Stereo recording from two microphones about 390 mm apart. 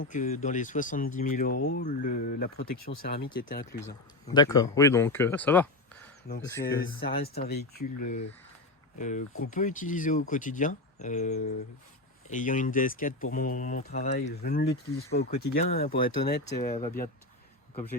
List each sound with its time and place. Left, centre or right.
0.0 s speech: centre
3.8 s speech: centre
7.0 s speech: left
9.0 s speech: centre